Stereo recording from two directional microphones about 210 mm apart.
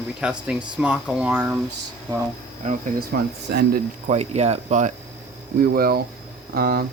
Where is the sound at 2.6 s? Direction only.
40° right (ahead or behind).